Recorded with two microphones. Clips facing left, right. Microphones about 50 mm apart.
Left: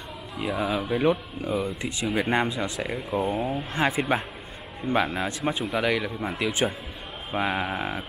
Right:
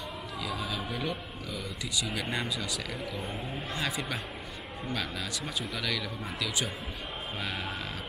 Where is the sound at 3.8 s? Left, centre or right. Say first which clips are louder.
Left 11 dB; left.